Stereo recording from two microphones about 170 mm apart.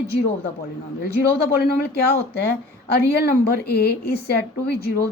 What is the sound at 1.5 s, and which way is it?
A woman's voice, 70° left (ahead or behind).